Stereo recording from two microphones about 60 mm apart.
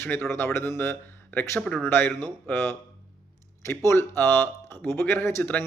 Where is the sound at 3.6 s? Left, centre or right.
Left.